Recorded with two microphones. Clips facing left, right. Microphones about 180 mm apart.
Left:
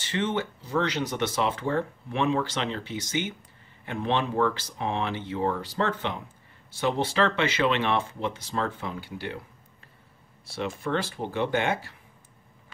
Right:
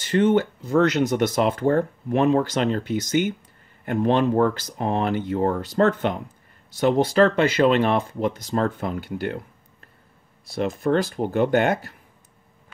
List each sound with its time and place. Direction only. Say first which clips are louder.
0.1 s speech: right 10 dB; 45° right (ahead or behind)
10.6 s speech: right 7 dB; 45° right (ahead or behind)